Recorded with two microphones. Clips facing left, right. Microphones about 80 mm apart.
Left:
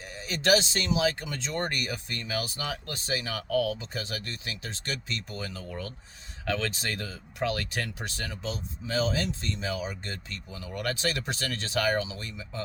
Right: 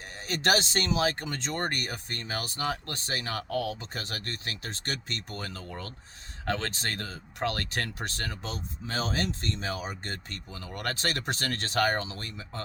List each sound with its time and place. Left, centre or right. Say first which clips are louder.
0.2 s speech: left 2 dB; right